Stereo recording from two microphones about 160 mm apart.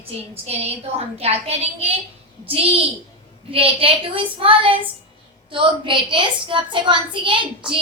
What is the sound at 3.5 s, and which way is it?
A woman's voice, 35° right (ahead or behind).